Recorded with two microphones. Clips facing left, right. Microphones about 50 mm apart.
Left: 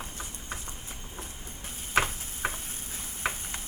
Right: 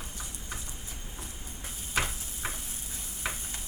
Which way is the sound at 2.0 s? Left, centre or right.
Left.